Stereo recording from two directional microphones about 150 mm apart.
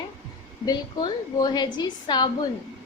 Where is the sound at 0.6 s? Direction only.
25° left (ahead or behind).